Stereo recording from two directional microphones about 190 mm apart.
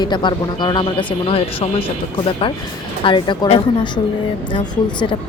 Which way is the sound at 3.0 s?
25° left (ahead or behind).